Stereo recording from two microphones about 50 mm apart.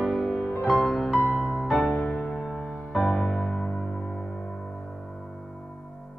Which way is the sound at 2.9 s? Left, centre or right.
Centre.